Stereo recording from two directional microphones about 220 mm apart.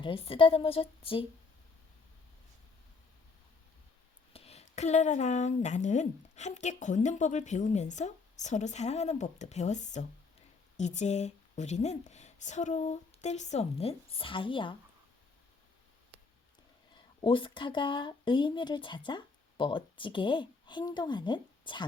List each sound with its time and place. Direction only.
0.0 s a woman's voice: 25° left (ahead or behind)
4.3 s a woman's voice: 25° left (ahead or behind)
16.9 s speech: 25° left (ahead or behind)